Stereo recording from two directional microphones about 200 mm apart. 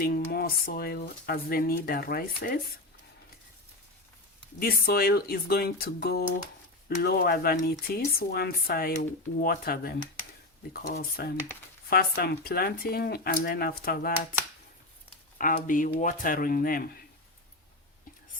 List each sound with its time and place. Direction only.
0.0 s speech: 50° left (ahead or behind)
4.6 s speech: 50° left (ahead or behind)
15.4 s speech: 40° left (ahead or behind)